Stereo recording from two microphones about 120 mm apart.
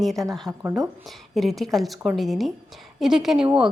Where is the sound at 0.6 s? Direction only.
20° right (ahead or behind).